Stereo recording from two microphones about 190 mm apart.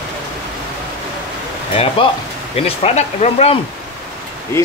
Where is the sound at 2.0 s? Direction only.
30° left (ahead or behind).